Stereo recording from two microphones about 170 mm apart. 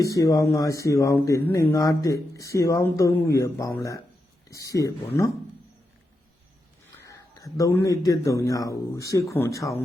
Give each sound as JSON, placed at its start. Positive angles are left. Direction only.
{"t": 0.1, "sound": "speech", "side_deg": 20}
{"t": 7.0, "sound": "a man's voice", "side_deg": 20}